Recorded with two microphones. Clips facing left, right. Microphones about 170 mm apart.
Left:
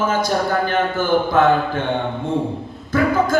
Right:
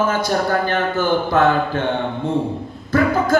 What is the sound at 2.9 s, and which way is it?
Speech, 50° right (ahead or behind).